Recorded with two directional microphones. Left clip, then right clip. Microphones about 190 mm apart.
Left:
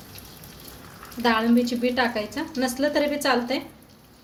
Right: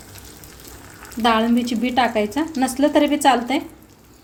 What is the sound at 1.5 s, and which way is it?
A woman's voice, 40° right (ahead or behind).